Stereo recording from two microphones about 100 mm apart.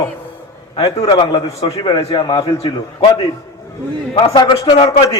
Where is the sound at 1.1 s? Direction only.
50° left (ahead or behind).